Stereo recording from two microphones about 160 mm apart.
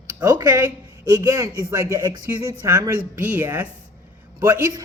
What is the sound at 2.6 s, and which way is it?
A woman's voice, 20° right (ahead or behind).